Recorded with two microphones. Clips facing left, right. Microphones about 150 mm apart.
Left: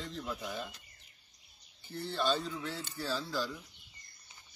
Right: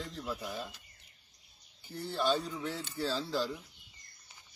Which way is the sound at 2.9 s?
25° right (ahead or behind).